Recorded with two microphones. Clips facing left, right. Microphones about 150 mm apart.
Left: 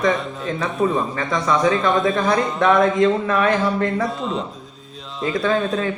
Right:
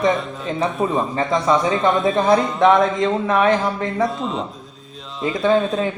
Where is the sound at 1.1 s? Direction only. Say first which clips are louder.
Right 3 dB; 25° right (ahead or behind).